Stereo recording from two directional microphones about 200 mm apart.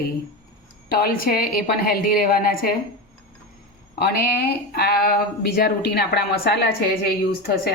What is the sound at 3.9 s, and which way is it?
A woman's voice, 50° left (ahead or behind).